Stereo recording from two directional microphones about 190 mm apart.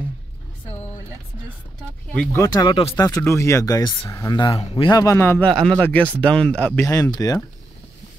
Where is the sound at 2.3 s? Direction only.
15° left (ahead or behind).